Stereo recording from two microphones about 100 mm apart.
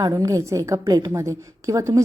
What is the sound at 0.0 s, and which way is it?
Speech, 35° right (ahead or behind).